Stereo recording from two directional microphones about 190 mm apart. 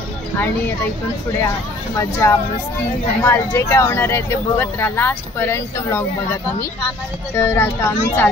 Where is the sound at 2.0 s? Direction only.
15° left (ahead or behind).